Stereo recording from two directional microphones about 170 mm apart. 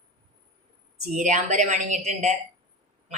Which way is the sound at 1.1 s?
50° right (ahead or behind).